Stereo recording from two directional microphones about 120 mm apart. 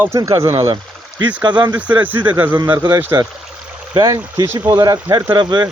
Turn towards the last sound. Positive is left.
turn(degrees=-40)  # may be behind; listen again after turning